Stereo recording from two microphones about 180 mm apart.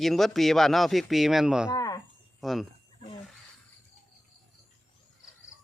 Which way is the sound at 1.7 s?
20° left (ahead or behind).